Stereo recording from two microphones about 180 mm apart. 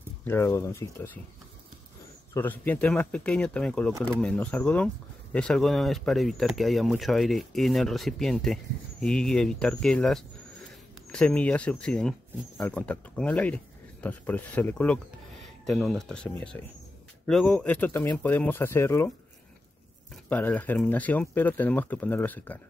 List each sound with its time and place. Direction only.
0.2 s speech: 15° left (ahead or behind)
2.3 s speech: 10° left (ahead or behind)
20.2 s speech: 10° left (ahead or behind)